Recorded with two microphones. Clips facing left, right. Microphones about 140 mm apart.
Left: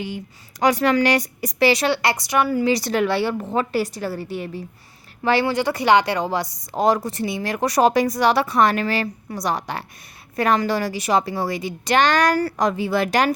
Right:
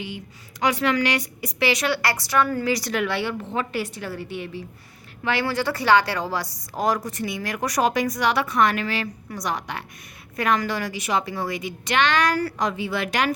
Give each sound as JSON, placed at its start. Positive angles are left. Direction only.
{"t": 0.6, "sound": "a woman's voice", "side_deg": 40}
{"t": 2.6, "sound": "a woman's voice", "side_deg": 25}
{"t": 5.5, "sound": "a woman's voice", "side_deg": 20}